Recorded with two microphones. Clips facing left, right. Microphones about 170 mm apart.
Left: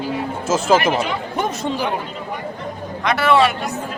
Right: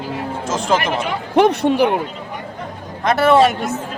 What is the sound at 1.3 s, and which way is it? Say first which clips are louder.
Speech: right 9 dB; 70° right (ahead or behind).